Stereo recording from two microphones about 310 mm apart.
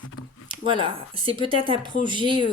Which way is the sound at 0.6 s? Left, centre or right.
Centre.